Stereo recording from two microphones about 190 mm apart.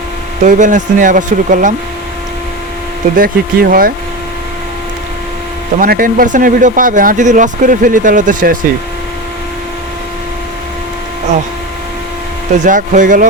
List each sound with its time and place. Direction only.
0.4 s speech: 40° right (ahead or behind)
3.2 s speech: 50° right (ahead or behind)
5.8 s speech: 50° right (ahead or behind)
12.5 s speech: 40° right (ahead or behind)